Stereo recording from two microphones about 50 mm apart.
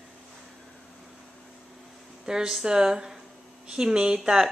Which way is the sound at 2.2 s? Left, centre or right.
Centre.